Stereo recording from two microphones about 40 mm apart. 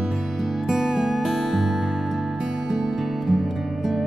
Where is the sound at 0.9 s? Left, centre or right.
Centre.